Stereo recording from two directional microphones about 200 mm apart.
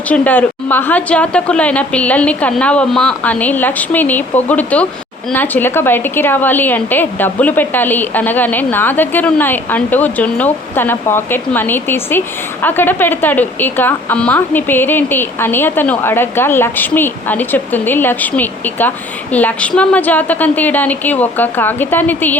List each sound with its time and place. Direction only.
0.1 s a woman's voice: 10° left (ahead or behind)